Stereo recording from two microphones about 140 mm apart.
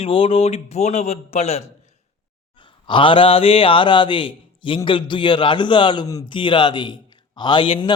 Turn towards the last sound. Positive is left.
turn(degrees=35)  # may be behind; listen again after turning